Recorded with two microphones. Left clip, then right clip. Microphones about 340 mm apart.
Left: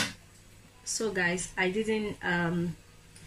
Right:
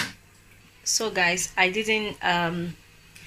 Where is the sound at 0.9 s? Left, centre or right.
Centre.